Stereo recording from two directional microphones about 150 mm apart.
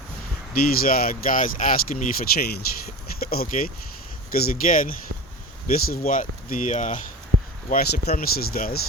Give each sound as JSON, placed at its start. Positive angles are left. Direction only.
{"t": 0.8, "sound": "speech", "side_deg": 75}
{"t": 7.7, "sound": "speech", "side_deg": 80}